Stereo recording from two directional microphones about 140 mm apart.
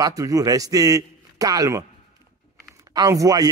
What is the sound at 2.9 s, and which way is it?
Speech, 25° right (ahead or behind).